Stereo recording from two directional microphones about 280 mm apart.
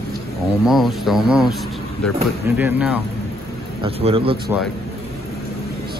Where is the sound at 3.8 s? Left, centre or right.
Centre.